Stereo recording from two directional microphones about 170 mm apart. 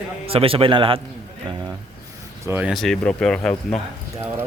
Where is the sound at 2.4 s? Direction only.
15° right (ahead or behind).